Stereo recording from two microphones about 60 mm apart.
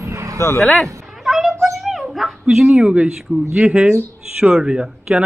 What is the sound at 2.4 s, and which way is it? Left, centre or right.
A child's voice, centre.